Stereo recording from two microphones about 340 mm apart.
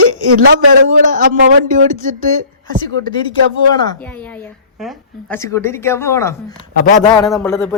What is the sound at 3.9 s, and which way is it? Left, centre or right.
A woman's voice, centre.